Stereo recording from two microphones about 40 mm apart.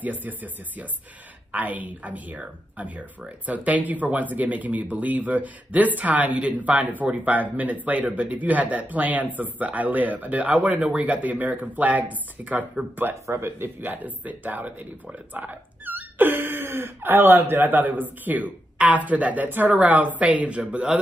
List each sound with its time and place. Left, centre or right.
0.0 s speech: right
13.3 s speech: right
13.7 s speech: right